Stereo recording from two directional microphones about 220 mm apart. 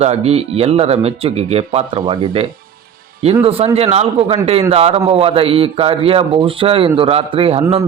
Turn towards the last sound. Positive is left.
turn(degrees=-25)  # may be behind; listen again after turning